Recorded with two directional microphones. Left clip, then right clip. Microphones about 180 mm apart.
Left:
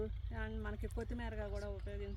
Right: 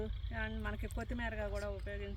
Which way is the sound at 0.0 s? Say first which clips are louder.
Right 3 dB; 15° right (ahead or behind).